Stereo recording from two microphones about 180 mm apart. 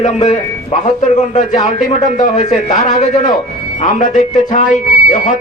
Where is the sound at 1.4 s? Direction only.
40° left (ahead or behind).